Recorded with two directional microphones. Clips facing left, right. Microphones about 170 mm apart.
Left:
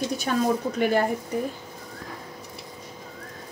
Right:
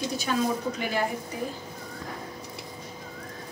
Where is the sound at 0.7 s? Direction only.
55° left (ahead or behind).